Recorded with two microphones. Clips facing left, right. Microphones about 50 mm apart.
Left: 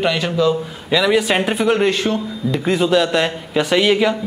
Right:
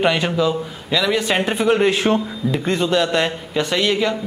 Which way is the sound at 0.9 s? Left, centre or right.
Centre.